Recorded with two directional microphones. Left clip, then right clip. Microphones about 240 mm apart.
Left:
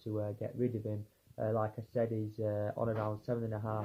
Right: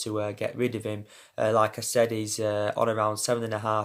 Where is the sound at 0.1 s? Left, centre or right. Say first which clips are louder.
Right 8 dB; centre.